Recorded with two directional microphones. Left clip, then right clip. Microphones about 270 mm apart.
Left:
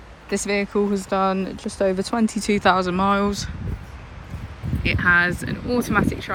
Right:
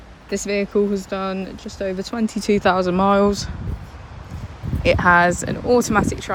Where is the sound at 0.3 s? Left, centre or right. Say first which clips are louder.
Right 1 dB; centre.